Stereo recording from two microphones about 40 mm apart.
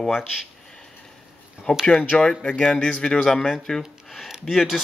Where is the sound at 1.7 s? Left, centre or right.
Left.